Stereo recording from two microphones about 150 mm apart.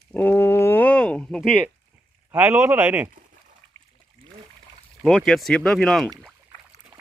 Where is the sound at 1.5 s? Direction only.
10° right (ahead or behind).